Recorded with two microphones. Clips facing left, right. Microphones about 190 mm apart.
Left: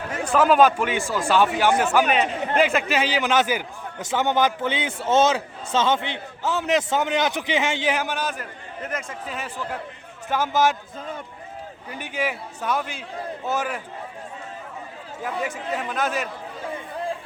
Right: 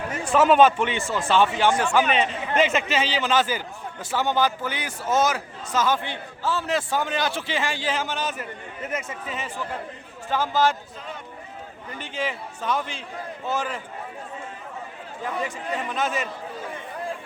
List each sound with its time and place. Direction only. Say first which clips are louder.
0.3 s speech: even; centre (ahead or behind)
2.4 s speech: left 1 dB; 45° left (ahead or behind)
2.9 s a man's voice: left 1 dB; 10° left (ahead or behind)
8.4 s speech: right 1 dB; 5° right (ahead or behind)
10.3 s a man's voice: left 1 dB; 15° left (ahead or behind)
11.9 s a man's voice: left 2 dB; 10° left (ahead or behind)
15.2 s speech: left 1 dB; 5° left (ahead or behind)